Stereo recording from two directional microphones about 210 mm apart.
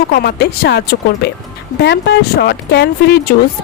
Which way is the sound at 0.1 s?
45° left (ahead or behind).